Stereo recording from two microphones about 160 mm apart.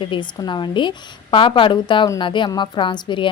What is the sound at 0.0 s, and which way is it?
A woman's voice, 30° left (ahead or behind).